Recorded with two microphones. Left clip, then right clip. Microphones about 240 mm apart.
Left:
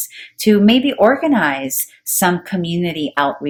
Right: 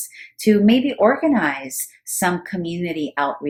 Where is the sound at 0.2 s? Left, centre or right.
Left.